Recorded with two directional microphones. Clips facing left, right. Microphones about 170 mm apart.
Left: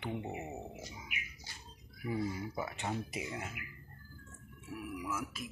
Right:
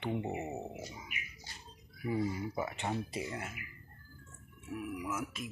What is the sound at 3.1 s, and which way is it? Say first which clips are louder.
Speech: right 2 dB; 10° left (ahead or behind).